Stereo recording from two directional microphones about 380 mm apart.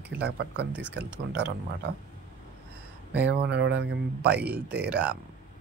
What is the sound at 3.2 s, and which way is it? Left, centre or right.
Speech, right.